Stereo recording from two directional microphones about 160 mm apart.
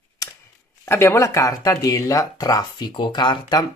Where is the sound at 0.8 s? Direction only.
15° left (ahead or behind).